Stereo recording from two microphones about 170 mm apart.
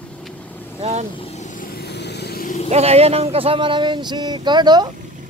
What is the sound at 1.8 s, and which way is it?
Vehicle, 80° left.